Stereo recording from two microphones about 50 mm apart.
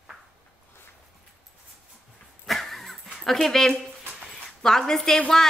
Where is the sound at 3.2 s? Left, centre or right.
Centre.